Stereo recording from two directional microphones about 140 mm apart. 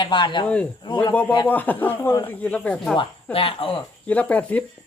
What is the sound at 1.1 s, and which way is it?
Speech, 10° left (ahead or behind).